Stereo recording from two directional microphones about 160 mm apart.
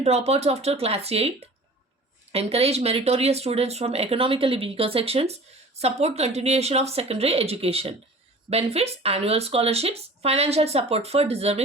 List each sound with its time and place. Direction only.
0.0 s speech: 40° right (ahead or behind)
2.3 s speech: 40° right (ahead or behind)